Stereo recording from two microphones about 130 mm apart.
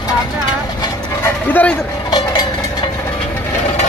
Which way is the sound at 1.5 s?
10° left (ahead or behind).